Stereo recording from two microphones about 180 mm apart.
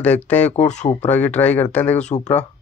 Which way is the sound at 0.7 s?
40° left (ahead or behind).